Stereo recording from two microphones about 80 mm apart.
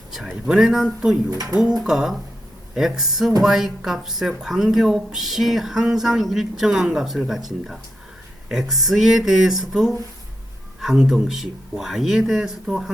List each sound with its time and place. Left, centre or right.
0.1 s speech: centre
1.3 s speech: right
1.8 s speech: centre